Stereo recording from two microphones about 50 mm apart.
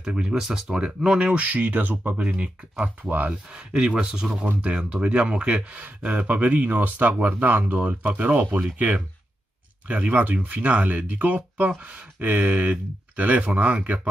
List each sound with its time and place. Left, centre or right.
0.0 s speech: centre
1.3 s speech: right
2.2 s speech: right
3.5 s speech: centre